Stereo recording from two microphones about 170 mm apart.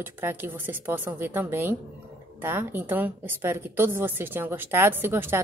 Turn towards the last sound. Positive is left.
turn(degrees=-10)  # may be behind; listen again after turning